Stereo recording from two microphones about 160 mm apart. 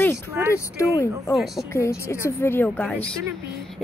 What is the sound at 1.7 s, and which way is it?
A woman's voice, 15° left (ahead or behind).